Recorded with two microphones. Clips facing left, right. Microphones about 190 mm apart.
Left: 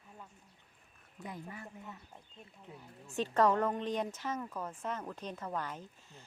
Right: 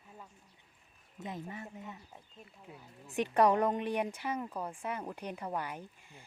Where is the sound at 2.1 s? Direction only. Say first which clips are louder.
Right 1 dB; 5° right (ahead or behind).